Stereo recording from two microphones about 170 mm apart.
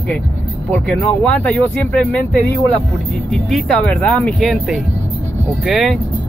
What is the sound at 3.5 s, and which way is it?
Speech, 5° left (ahead or behind).